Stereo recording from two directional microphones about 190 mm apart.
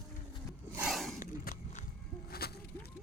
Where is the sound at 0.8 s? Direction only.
Centre (ahead or behind).